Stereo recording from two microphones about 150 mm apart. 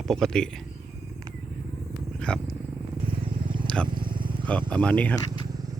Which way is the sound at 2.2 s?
5° left (ahead or behind).